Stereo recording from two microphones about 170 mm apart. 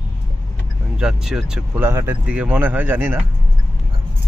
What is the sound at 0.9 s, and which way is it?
Speech, 5° right (ahead or behind).